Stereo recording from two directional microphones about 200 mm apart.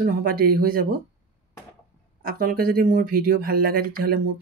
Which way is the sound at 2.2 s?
45° right (ahead or behind).